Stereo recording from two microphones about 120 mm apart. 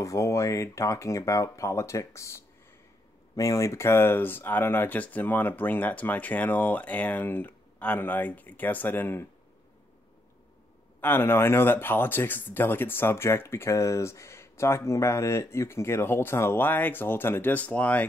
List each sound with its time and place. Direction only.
0.0 s speech: 25° left (ahead or behind)
11.0 s speech: 15° left (ahead or behind)